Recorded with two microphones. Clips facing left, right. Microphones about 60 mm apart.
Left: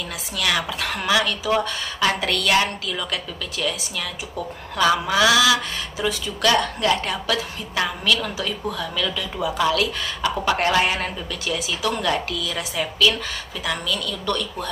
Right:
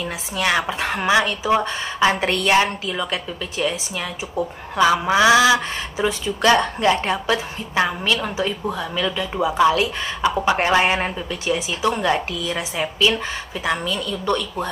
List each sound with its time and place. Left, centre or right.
0.0 s speech: right